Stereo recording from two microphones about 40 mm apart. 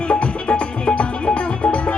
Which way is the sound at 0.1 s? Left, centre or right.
Left.